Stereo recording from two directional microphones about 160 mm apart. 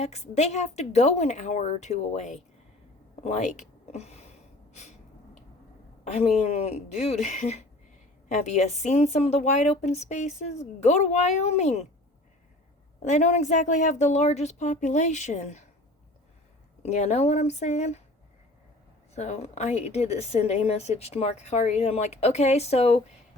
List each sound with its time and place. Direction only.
0.0 s a woman's voice: 45° left (ahead or behind)
3.2 s a sound: 50° left (ahead or behind)
6.1 s a woman's voice: 40° left (ahead or behind)
13.1 s a woman's voice: 50° left (ahead or behind)
16.8 s a woman's voice: 45° left (ahead or behind)
19.1 s a woman's voice: 45° left (ahead or behind)